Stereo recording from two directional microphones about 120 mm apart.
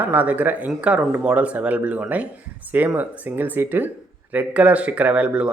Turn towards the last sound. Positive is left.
turn(degrees=-10)  # may be behind; listen again after turning